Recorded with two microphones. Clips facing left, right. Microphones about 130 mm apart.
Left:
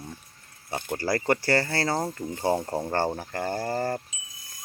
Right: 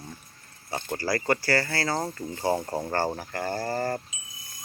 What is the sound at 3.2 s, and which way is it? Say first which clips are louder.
Speech: left 1 dB; 20° left (ahead or behind).